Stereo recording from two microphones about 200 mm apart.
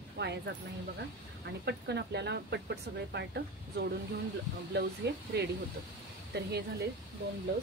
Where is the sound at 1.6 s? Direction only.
60° right (ahead or behind).